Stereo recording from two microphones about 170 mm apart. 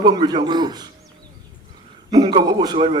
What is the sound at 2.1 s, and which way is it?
Speech, 25° right (ahead or behind).